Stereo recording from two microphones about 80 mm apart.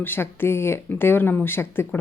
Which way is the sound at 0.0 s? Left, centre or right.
Left.